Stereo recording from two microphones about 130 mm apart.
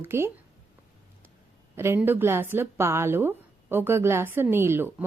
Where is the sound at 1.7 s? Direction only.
20° right (ahead or behind).